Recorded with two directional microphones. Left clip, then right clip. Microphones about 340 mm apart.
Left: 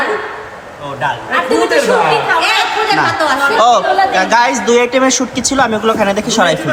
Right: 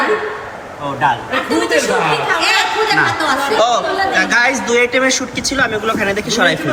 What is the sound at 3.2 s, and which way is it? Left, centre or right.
Speech, left.